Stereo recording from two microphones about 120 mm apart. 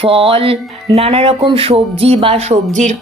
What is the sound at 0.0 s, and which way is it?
A woman's voice, 50° right (ahead or behind).